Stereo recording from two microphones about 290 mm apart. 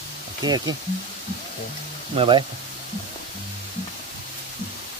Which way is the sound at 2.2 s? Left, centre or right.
Centre.